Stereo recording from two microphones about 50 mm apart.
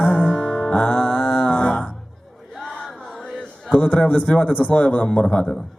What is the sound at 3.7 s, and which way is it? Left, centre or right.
Music, left.